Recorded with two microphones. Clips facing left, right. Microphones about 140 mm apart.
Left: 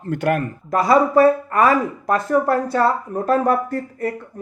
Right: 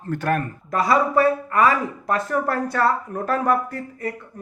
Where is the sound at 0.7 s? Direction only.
35° left (ahead or behind).